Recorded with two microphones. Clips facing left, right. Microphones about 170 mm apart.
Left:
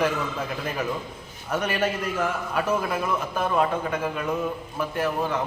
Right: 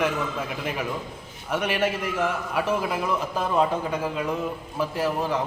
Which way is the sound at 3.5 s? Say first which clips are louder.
Right 1 dB; 15° right (ahead or behind).